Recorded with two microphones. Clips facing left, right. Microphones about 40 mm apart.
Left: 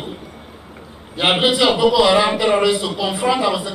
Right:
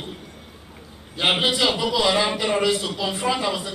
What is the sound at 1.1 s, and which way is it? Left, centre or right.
A man's voice, centre.